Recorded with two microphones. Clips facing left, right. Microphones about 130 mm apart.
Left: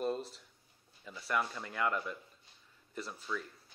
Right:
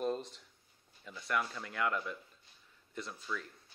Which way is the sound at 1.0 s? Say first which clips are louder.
Left 1 dB; 5° left (ahead or behind).